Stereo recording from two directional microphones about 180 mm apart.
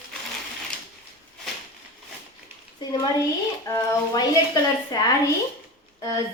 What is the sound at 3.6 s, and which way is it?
Speech, 20° left (ahead or behind).